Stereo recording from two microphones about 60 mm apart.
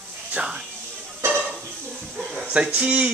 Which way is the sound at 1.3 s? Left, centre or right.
Right.